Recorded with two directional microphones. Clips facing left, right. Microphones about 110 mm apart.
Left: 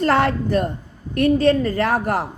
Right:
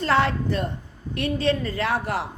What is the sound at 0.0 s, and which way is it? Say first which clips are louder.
A woman's voice: left 4 dB; 50° left (ahead or behind).